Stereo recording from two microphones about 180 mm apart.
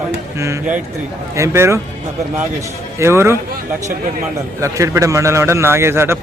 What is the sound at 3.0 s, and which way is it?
Speech, 15° right (ahead or behind).